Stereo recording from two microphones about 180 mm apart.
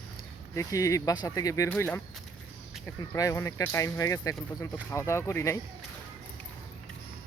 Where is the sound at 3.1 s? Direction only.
15° left (ahead or behind).